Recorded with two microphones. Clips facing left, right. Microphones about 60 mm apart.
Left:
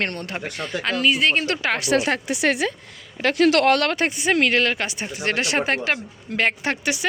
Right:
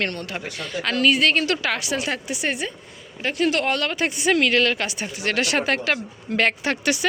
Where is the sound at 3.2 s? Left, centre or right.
Left.